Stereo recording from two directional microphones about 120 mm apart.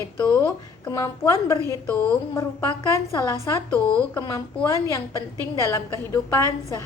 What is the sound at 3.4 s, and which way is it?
Speech, 20° left (ahead or behind).